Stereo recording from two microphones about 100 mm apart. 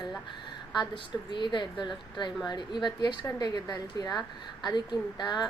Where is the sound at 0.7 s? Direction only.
50° left (ahead or behind).